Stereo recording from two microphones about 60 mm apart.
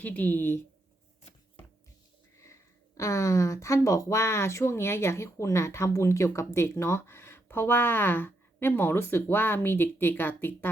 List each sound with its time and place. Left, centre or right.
0.0 s speech: left
3.0 s speech: left